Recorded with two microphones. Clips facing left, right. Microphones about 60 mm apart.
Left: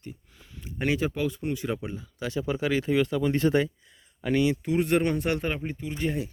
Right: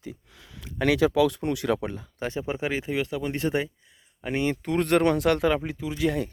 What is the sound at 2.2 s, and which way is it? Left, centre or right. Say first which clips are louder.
Speech: left 1 dB; right.